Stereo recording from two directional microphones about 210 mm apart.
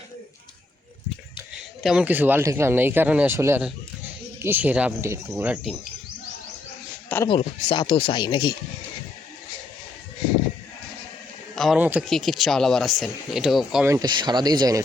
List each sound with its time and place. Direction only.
1.8 s speech: 5° right (ahead or behind)
7.3 s speech: 25° left (ahead or behind)
11.5 s speech: centre (ahead or behind)
13.8 s speech: 15° right (ahead or behind)